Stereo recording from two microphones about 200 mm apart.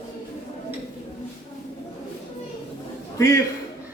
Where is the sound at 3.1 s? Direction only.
15° left (ahead or behind).